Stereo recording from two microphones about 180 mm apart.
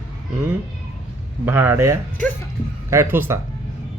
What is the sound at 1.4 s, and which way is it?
Speech, 10° right (ahead or behind).